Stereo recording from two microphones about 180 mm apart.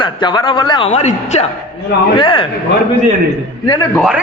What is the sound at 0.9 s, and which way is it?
A woman's voice, 40° left (ahead or behind).